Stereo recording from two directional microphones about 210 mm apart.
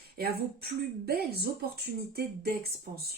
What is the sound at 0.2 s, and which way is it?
Speech, 50° right (ahead or behind).